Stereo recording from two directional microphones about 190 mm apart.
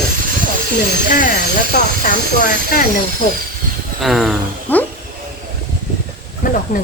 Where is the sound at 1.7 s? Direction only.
50° left (ahead or behind).